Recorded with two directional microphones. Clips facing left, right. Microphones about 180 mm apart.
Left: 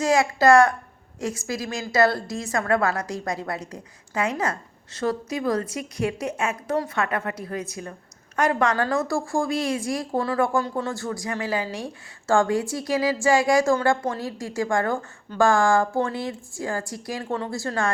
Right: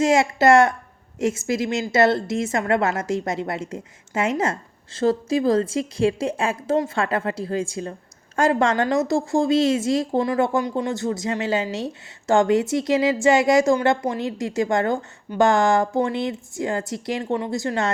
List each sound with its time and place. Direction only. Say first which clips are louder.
0.0 s a woman's voice: right 2 dB; 25° right (ahead or behind)